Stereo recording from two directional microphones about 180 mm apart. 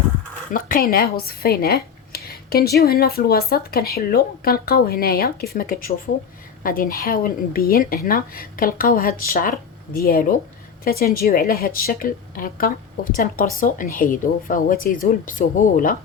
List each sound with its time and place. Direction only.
0.5 s speech: 55° left (ahead or behind)